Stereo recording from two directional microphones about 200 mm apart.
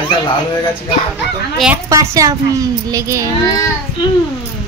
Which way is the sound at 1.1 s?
5° right (ahead or behind).